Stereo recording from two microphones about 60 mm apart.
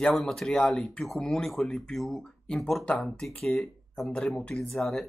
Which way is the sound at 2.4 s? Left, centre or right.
Centre.